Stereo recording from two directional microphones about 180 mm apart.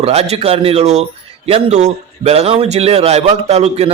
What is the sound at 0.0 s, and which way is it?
A man's voice, 35° right (ahead or behind).